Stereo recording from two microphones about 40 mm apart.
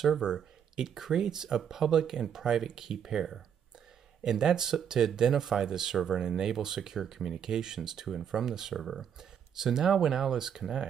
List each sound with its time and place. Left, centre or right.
0.2 s speech: centre
8.7 s speech: centre